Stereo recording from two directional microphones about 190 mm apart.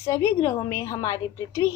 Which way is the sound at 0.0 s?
15° left (ahead or behind).